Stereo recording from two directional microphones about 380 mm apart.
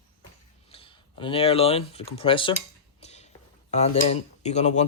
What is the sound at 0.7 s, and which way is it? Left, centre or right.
Speech, centre.